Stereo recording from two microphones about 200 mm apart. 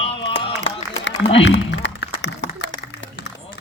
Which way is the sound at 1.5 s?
60° left (ahead or behind).